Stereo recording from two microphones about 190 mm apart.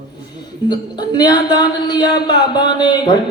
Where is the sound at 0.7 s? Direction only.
20° left (ahead or behind).